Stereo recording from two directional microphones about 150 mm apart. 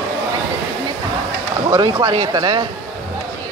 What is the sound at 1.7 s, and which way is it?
Speech, 30° right (ahead or behind).